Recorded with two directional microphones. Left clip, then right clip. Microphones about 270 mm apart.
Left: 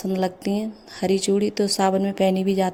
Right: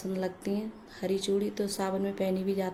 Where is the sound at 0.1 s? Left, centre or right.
Left.